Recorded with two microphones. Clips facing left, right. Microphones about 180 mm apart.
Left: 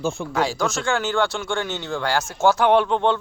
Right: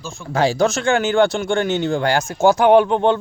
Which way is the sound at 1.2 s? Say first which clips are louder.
Right 7 dB; 20° right (ahead or behind).